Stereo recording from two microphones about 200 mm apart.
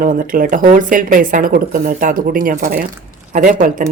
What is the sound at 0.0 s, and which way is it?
Speech, 45° right (ahead or behind).